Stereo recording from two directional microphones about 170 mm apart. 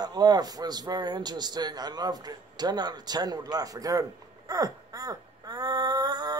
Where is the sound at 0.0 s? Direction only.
25° right (ahead or behind).